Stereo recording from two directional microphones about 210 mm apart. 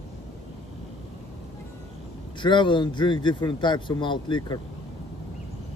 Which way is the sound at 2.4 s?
20° left (ahead or behind).